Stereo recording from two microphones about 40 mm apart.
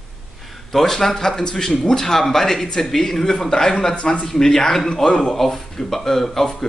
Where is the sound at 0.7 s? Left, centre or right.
Centre.